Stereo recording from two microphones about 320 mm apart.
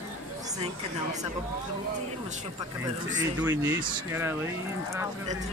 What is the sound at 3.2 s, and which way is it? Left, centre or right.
Speech, centre.